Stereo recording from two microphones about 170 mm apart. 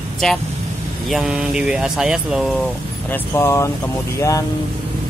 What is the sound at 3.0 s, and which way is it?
Speech, 15° left (ahead or behind).